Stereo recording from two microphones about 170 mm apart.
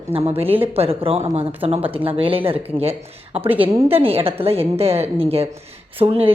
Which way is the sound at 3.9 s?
35° right (ahead or behind).